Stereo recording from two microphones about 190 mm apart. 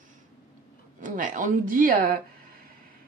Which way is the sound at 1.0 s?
45° right (ahead or behind).